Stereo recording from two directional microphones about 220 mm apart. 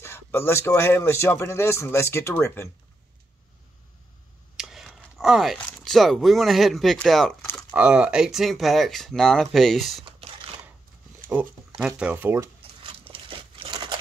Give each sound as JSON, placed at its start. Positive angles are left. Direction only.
{"t": 0.0, "sound": "speech", "side_deg": 10}
{"t": 4.6, "sound": "a sound", "side_deg": 0}
{"t": 5.7, "sound": "speech", "side_deg": 5}
{"t": 10.0, "sound": "crumpling", "side_deg": -25}
{"t": 12.0, "sound": "speech", "side_deg": -10}
{"t": 12.8, "sound": "crumpling", "side_deg": -25}